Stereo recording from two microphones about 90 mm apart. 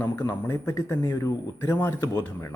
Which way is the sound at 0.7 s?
40° left (ahead or behind).